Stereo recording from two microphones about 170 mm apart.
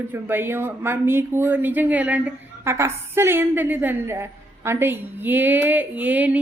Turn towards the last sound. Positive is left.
turn(degrees=-10)  # may be behind; listen again after turning